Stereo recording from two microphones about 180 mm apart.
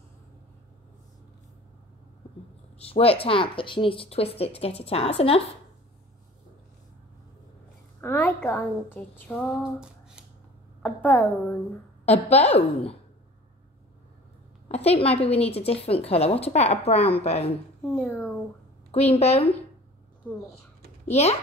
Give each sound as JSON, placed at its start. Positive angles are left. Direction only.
{"t": 2.8, "sound": "a woman's voice", "side_deg": 35}
{"t": 8.0, "sound": "a woman's voice", "side_deg": 10}
{"t": 10.8, "sound": "a woman's voice", "side_deg": 5}
{"t": 12.1, "sound": "a woman's voice", "side_deg": 35}
{"t": 14.7, "sound": "a woman's voice", "side_deg": 35}
{"t": 17.8, "sound": "speech", "side_deg": 5}
{"t": 18.9, "sound": "a woman's voice", "side_deg": 35}
{"t": 20.2, "sound": "a child's voice", "side_deg": 10}
{"t": 21.0, "sound": "a child's voice", "side_deg": 35}